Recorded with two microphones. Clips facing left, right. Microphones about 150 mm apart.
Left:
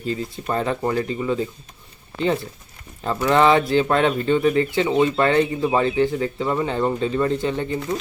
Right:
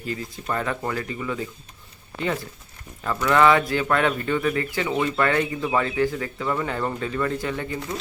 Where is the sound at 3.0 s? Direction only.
25° left (ahead or behind).